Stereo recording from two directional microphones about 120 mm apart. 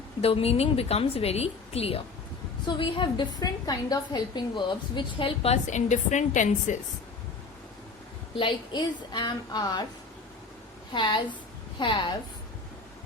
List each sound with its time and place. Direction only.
0.2 s a woman's voice: 55° left (ahead or behind)
2.6 s a woman's voice: 40° left (ahead or behind)
5.5 s a woman's voice: 85° left
8.4 s a woman's voice: 40° left (ahead or behind)
10.9 s a woman's voice: 40° left (ahead or behind)